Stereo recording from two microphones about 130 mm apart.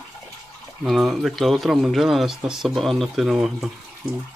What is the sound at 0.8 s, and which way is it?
Speech, centre (ahead or behind).